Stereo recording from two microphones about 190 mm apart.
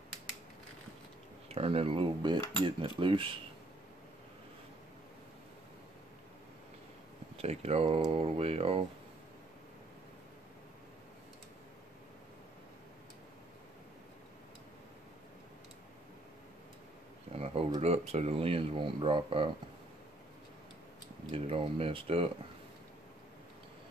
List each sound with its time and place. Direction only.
1.5 s speech: 30° right (ahead or behind)
7.3 s speech: 35° right (ahead or behind)
17.7 s speech: 35° right (ahead or behind)
21.3 s speech: 30° right (ahead or behind)